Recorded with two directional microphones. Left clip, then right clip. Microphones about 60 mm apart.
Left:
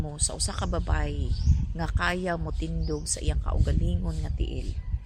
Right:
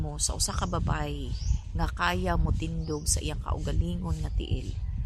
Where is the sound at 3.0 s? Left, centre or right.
Right.